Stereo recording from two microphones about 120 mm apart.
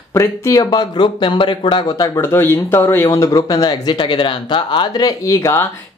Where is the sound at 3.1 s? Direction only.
30° left (ahead or behind).